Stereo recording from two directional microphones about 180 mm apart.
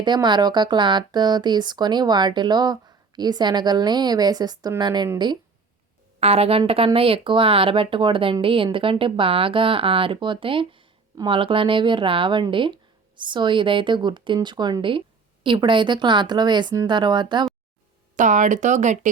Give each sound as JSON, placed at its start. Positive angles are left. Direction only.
{"t": 0.0, "sound": "speech", "side_deg": -25}
{"t": 6.1, "sound": "speech", "side_deg": -35}
{"t": 18.2, "sound": "speech", "side_deg": -45}